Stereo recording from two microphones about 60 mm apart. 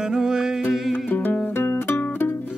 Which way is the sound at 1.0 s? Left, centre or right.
Left.